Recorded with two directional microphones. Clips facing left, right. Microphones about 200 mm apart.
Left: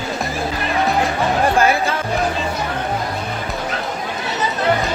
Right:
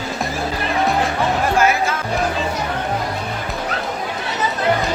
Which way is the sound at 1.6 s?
30° left (ahead or behind).